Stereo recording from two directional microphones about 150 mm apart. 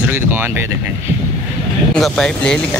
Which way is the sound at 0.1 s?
15° right (ahead or behind).